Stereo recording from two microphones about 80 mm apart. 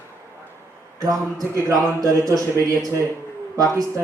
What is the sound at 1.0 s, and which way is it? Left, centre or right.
A man's voice, right.